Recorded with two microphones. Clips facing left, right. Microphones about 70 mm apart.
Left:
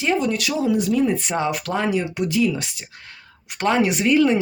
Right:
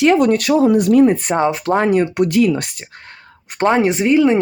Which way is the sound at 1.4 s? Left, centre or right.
Right.